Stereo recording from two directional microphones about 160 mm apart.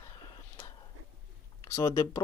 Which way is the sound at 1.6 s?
20° left (ahead or behind).